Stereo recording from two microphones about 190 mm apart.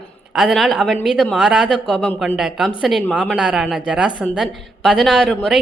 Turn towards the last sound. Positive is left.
turn(degrees=0)  # may be behind; listen again after turning